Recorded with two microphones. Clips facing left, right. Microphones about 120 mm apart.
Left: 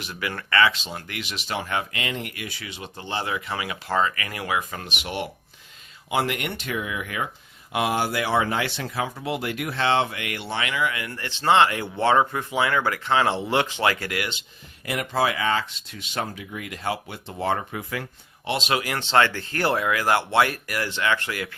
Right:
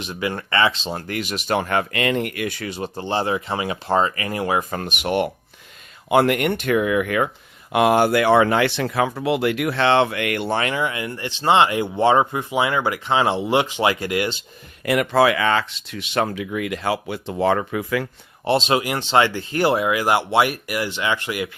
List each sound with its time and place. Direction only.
0.0 s speech: 25° right (ahead or behind)
14.8 s speech: 75° right (ahead or behind)
18.4 s speech: 30° right (ahead or behind)